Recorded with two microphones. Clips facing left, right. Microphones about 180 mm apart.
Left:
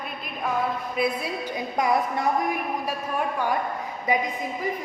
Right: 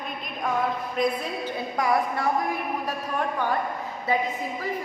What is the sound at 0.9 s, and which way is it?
A woman's voice, 10° left (ahead or behind).